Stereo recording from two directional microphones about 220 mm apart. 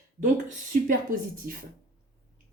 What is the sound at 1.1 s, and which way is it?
Speech, 35° right (ahead or behind).